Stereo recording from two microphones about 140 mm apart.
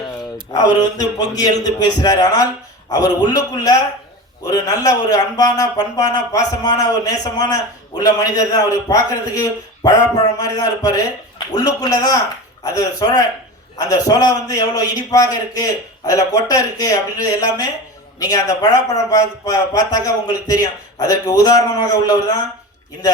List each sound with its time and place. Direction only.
0.5 s a man's voice: 30° left (ahead or behind)